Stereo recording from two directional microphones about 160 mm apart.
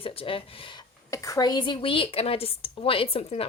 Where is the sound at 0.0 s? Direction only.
35° left (ahead or behind).